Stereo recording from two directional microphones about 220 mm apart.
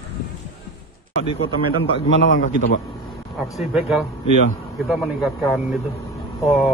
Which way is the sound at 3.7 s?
5° right (ahead or behind).